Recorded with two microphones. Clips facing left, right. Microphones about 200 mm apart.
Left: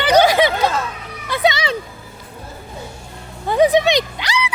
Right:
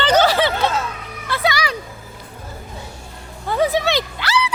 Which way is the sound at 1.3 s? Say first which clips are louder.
Left 3 dB; 20° left (ahead or behind).